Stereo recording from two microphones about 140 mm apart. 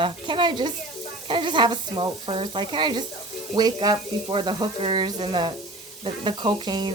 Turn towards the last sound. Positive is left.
turn(degrees=-30)  # may be behind; listen again after turning